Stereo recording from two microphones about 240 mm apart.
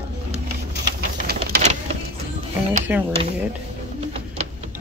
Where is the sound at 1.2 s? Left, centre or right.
Right.